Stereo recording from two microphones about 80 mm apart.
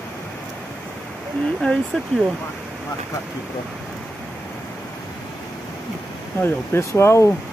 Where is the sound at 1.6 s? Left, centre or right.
Centre.